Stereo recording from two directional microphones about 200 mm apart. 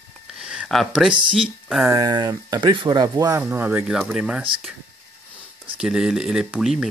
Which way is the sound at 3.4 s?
10° right (ahead or behind).